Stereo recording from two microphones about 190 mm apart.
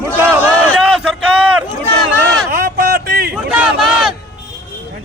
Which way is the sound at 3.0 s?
50° right (ahead or behind).